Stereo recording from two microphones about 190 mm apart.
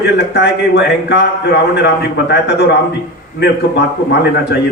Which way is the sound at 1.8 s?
60° left (ahead or behind).